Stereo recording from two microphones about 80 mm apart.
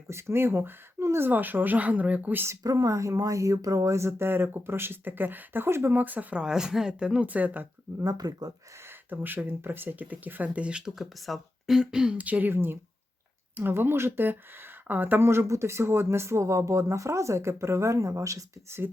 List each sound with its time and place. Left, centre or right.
0.1 s speech: right
2.6 s speech: right
6.4 s speech: centre
8.0 s speech: right
8.8 s speech: right